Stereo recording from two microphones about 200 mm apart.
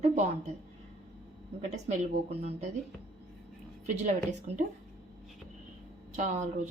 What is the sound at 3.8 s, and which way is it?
Speech, 35° right (ahead or behind).